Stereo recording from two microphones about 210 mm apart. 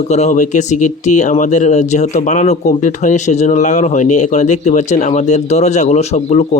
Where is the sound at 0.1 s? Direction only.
35° left (ahead or behind).